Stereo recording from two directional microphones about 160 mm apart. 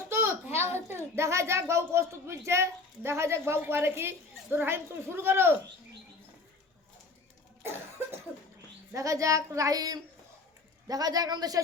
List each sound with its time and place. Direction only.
0.1 s a sound: 15° right (ahead or behind)
1.1 s a child's voice: 15° right (ahead or behind)
7.6 s cough: 15° right (ahead or behind)
8.9 s speech: 20° right (ahead or behind)